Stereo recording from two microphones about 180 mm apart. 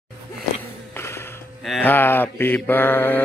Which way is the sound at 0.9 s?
15° left (ahead or behind).